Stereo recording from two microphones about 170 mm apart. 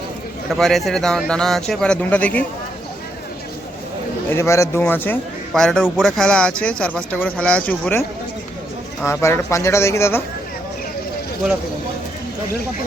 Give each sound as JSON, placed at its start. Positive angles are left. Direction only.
{"t": 0.5, "sound": "speech", "side_deg": 0}
{"t": 4.3, "sound": "speech", "side_deg": 15}
{"t": 9.0, "sound": "speech", "side_deg": 15}